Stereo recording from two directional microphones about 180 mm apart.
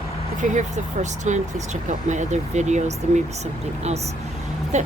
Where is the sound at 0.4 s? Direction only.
45° right (ahead or behind).